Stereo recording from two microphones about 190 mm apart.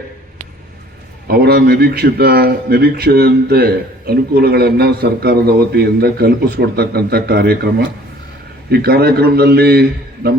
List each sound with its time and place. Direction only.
1.3 s a man's voice: 55° right (ahead or behind)